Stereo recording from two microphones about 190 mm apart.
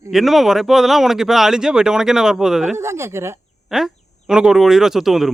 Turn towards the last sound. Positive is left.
turn(degrees=0)  # may be behind; listen again after turning